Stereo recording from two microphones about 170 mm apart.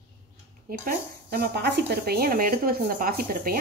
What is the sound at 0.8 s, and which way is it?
Speech, 70° right (ahead or behind).